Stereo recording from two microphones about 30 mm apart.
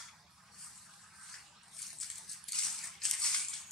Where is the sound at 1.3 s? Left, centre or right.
Centre.